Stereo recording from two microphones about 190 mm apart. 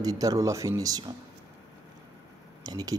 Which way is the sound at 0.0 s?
20° right (ahead or behind).